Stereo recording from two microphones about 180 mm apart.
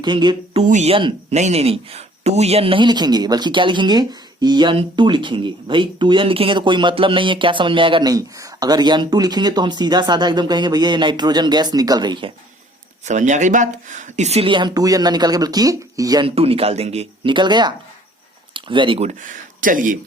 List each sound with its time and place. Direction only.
0.0 s speech: 25° right (ahead or behind)
0.7 s speech: 35° right (ahead or behind)
13.1 s speech: 40° right (ahead or behind); by 16.3 s 20° right (ahead or behind)
16.3 s speech: 35° right (ahead or behind)